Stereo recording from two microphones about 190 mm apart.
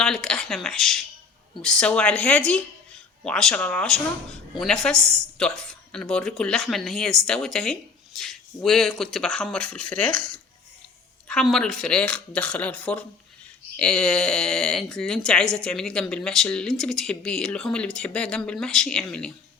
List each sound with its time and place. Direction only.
0.0 s speech: 5° left (ahead or behind)
10.1 s speech: 45° right (ahead or behind)
11.3 s speech: centre (ahead or behind)